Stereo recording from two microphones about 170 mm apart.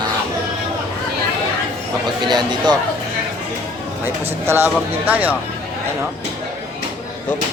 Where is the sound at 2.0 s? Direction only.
25° right (ahead or behind).